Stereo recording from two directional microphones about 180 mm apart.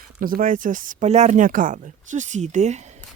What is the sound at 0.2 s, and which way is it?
Speech, 50° right (ahead or behind).